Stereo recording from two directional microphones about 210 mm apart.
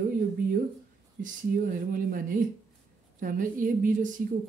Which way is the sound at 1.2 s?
40° right (ahead or behind).